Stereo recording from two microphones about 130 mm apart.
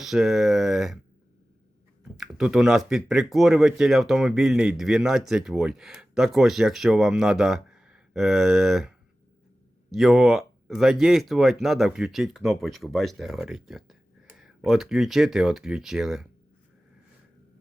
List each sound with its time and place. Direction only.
0.0 s speech: 5° right (ahead or behind)
2.1 s speech: 5° right (ahead or behind)